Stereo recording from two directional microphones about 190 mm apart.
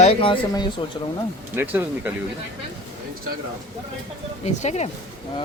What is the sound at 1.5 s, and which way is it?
Speech, 10° right (ahead or behind).